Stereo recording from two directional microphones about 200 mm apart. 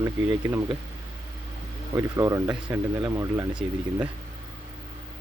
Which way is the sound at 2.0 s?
15° right (ahead or behind).